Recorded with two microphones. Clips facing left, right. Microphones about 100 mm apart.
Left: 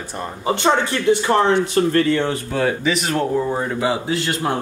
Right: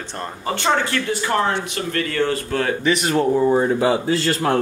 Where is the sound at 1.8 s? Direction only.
35° left (ahead or behind).